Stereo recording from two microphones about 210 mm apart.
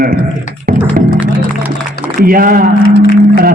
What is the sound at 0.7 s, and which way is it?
Music, 45° right (ahead or behind).